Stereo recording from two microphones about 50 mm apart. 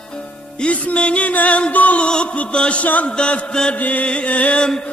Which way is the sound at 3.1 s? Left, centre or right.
Centre.